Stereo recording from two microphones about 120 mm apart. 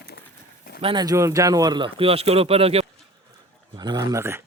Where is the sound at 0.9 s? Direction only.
30° right (ahead or behind); by 2.8 s 55° right (ahead or behind).